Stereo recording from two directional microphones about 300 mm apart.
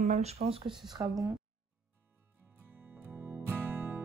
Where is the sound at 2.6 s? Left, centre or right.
Centre.